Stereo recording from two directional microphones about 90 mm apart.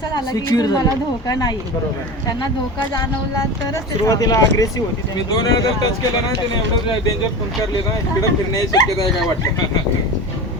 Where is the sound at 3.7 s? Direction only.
35° left (ahead or behind).